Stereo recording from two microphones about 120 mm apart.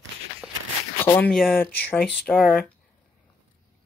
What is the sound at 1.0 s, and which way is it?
Speech, 20° left (ahead or behind).